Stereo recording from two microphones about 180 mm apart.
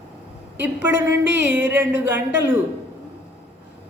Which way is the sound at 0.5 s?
10° right (ahead or behind).